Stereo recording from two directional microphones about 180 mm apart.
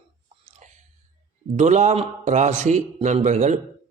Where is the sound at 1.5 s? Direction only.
40° right (ahead or behind).